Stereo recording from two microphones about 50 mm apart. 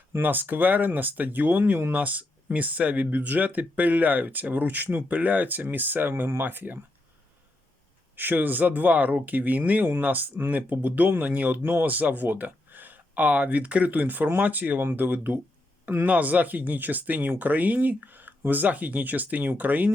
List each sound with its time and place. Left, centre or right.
0.2 s speech: right
8.1 s speech: right
16.0 s speech: right